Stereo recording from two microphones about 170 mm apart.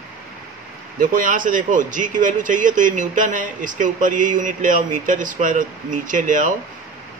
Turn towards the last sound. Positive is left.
turn(degrees=-50)  # may be behind; listen again after turning